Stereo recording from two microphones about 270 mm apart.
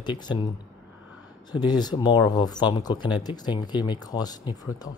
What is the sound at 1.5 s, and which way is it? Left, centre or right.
Speech, centre.